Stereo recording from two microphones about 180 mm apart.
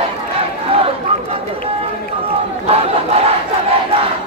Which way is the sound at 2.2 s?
35° right (ahead or behind).